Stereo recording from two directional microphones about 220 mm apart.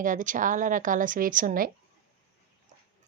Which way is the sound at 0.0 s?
35° right (ahead or behind).